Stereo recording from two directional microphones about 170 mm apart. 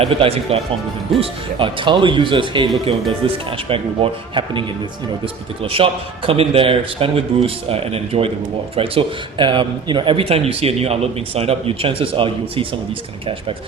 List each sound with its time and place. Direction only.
0.0 s a man's voice: 35° right (ahead or behind)
5.6 s a man's voice: 35° right (ahead or behind)